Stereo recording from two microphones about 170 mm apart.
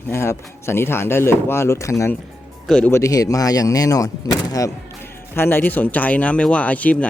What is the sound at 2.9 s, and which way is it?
Speech, 20° left (ahead or behind).